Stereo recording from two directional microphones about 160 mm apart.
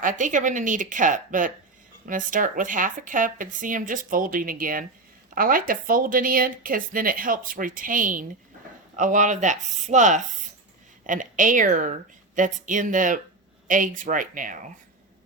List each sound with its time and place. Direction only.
0.0 s speech: 55° right (ahead or behind)